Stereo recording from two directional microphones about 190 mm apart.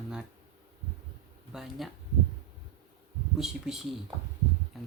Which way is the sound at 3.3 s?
Centre (ahead or behind).